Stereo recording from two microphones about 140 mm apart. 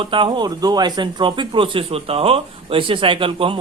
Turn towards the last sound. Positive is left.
turn(degrees=-40)  # may be behind; listen again after turning